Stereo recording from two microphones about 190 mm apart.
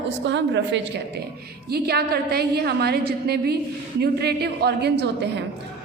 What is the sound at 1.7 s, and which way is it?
A woman's voice, 55° right (ahead or behind).